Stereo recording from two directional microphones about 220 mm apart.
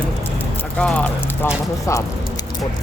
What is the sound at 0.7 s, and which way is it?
Speech, 5° left (ahead or behind).